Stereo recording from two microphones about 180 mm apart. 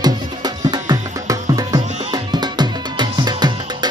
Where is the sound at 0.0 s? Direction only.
20° right (ahead or behind).